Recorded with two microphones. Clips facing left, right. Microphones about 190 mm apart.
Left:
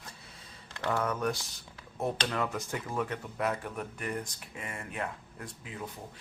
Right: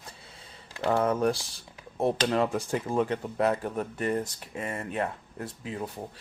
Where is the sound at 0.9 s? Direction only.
30° right (ahead or behind).